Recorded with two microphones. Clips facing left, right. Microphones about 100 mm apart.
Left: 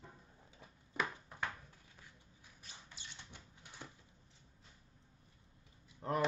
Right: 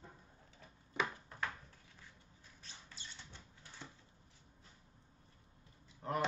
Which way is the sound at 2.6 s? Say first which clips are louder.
Even; 15° left (ahead or behind).